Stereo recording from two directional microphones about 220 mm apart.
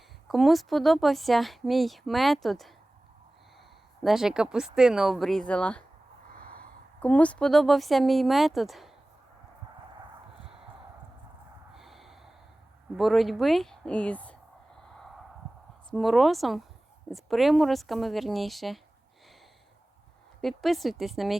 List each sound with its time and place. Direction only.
0.3 s speech: centre (ahead or behind)
4.0 s speech: centre (ahead or behind)
6.4 s a sound: 40° right (ahead or behind)
7.0 s speech: 5° left (ahead or behind)
11.7 s snort: centre (ahead or behind)
13.0 s speech: centre (ahead or behind)
15.9 s speech: centre (ahead or behind)
20.4 s speech: centre (ahead or behind)